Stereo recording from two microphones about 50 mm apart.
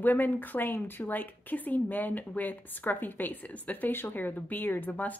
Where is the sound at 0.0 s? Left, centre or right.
Left.